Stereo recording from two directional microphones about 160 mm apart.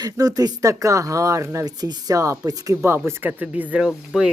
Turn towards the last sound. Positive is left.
turn(degrees=-5)  # may be behind; listen again after turning